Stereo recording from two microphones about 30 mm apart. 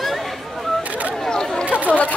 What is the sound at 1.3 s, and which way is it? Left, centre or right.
Chatter, left.